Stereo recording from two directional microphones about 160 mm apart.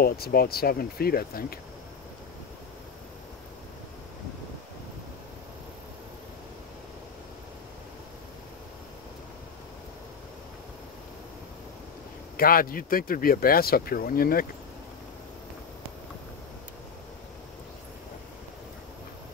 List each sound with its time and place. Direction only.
0.0 s speech: 70° left (ahead or behind)
12.4 s speech: 65° left (ahead or behind)